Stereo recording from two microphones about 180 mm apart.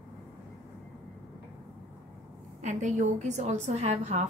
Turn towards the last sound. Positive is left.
turn(degrees=-40)  # may be behind; listen again after turning